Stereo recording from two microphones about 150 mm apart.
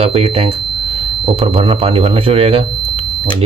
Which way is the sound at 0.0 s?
40° right (ahead or behind).